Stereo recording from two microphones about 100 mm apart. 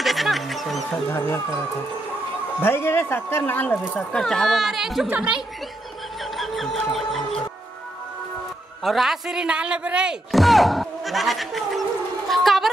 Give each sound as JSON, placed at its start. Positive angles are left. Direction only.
{"t": 0.0, "sound": "music", "side_deg": 0}
{"t": 1.1, "sound": "speech", "side_deg": 25}
{"t": 2.6, "sound": "speech", "side_deg": 25}
{"t": 3.9, "sound": "a woman's voice", "side_deg": 5}
{"t": 6.3, "sound": "music", "side_deg": 0}
{"t": 8.8, "sound": "speech", "side_deg": 0}
{"t": 12.3, "sound": "a sound", "side_deg": 0}